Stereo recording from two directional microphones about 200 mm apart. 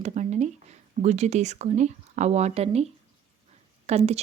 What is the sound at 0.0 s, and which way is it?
A woman's voice, 35° right (ahead or behind).